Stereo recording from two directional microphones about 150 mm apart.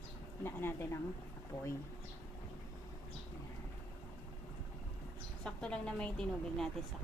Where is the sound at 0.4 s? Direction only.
15° left (ahead or behind).